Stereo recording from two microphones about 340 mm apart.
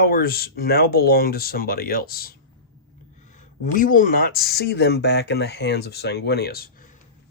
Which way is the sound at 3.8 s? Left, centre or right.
Left.